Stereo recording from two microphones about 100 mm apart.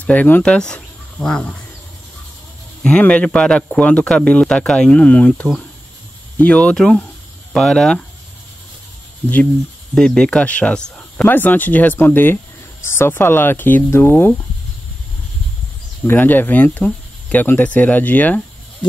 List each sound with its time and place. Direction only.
0.0 s speech: 15° left (ahead or behind)
2.8 s speech: 10° left (ahead or behind)
9.9 s speech: 10° left (ahead or behind)
16.1 s speech: 20° left (ahead or behind)